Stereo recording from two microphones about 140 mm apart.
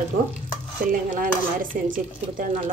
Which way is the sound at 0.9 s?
75° right (ahead or behind).